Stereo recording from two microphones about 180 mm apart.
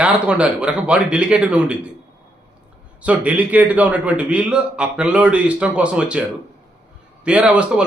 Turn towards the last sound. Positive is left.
turn(degrees=-5)  # may be behind; listen again after turning